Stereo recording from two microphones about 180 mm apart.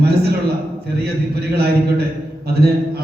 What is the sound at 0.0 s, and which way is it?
A man's voice, 60° right (ahead or behind).